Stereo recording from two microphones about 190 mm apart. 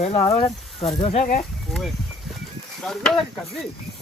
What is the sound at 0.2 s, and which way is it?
Speech, 20° left (ahead or behind).